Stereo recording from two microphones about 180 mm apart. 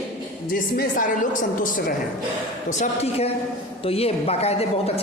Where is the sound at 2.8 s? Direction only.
35° left (ahead or behind).